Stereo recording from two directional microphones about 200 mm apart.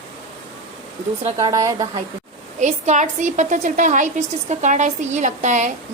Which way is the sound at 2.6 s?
35° right (ahead or behind).